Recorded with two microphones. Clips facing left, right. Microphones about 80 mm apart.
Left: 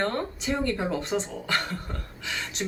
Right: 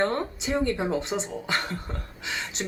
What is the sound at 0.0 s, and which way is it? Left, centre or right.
Speech, centre.